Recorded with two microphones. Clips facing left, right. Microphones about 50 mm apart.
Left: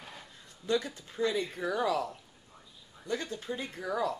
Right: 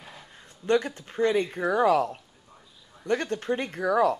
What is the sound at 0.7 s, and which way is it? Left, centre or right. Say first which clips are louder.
A woman's voice: right 7 dB; right.